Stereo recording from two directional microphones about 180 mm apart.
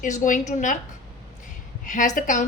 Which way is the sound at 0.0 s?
45° left (ahead or behind).